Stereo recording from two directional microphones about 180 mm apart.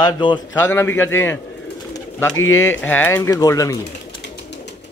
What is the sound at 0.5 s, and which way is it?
Speech, 10° left (ahead or behind).